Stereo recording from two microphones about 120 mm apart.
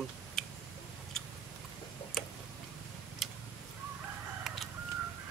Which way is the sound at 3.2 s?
Centre (ahead or behind).